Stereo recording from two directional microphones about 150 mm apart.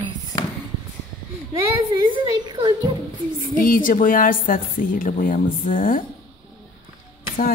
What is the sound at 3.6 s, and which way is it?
Speech, 65° left (ahead or behind).